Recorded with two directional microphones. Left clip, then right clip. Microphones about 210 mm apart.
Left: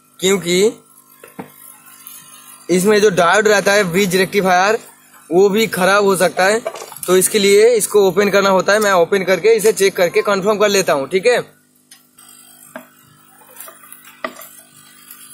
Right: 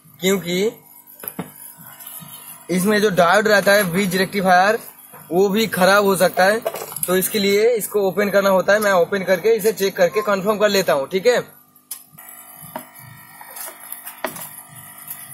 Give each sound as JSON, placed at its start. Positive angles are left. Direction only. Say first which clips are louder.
{"t": 0.2, "sound": "speech", "louder": "left 5 dB", "side_deg": 35}
{"t": 2.6, "sound": "speech", "louder": "left 6 dB", "side_deg": 30}